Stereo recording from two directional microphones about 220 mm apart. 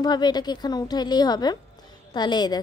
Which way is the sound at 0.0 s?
20° left (ahead or behind).